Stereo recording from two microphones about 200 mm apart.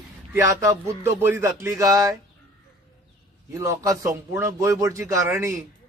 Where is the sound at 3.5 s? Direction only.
15° right (ahead or behind).